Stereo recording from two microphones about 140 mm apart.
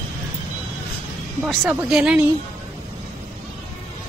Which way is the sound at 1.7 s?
5° right (ahead or behind).